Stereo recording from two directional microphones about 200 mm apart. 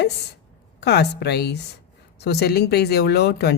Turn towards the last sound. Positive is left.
turn(degrees=55)  # may be behind; listen again after turning